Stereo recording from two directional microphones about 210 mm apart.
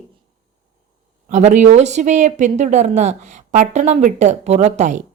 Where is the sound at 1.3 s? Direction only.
35° right (ahead or behind).